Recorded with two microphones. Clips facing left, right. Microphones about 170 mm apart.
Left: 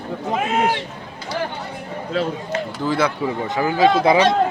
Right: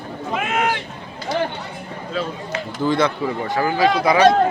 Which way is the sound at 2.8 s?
5° left (ahead or behind).